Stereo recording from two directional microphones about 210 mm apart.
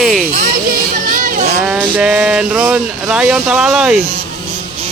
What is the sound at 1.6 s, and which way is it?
Speech, 5° right (ahead or behind).